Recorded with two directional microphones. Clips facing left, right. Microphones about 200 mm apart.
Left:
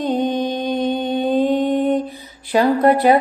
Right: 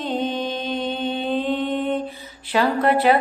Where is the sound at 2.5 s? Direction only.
35° left (ahead or behind).